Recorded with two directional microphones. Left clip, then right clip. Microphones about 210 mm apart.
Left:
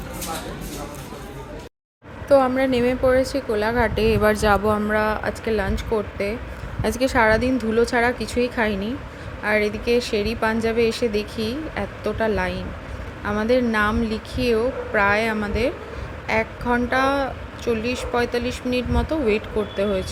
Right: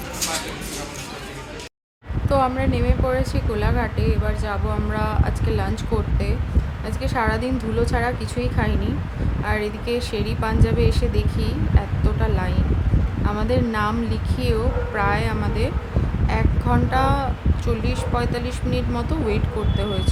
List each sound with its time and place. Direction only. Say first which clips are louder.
2.3 s a woman's voice: left 4 dB; 10° left (ahead or behind)
3.9 s speech: left 8 dB; 35° left (ahead or behind)
4.9 s a woman's voice: left 5 dB; 15° left (ahead or behind)
6.8 s a woman's voice: left 8 dB; 25° left (ahead or behind)
7.2 s a woman's voice: left 4 dB; 10° left (ahead or behind)